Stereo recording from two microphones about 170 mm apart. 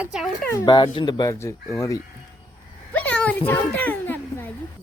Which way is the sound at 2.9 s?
10° left (ahead or behind).